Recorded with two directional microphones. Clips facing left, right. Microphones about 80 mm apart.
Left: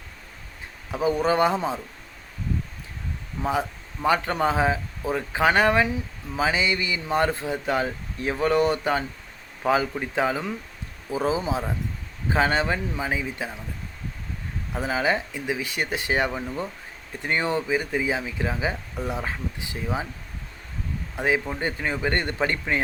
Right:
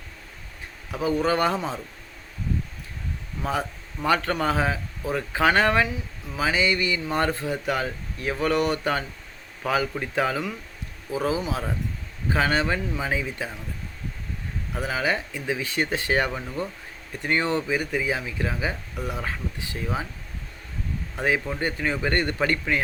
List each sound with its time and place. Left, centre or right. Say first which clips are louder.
0.9 s speech: left 1 dB; left
3.4 s speech: left 2 dB; centre
14.7 s speech: left 2 dB; left
21.2 s speech: left 1 dB; centre